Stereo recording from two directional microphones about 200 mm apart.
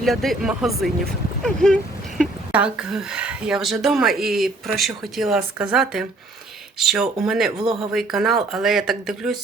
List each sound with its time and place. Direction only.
0.0 s speech: centre (ahead or behind)